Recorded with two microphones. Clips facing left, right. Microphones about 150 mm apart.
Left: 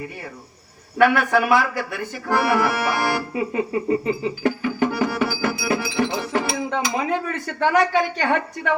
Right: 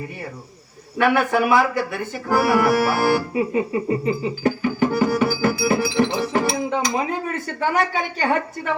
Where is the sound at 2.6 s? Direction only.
35° right (ahead or behind).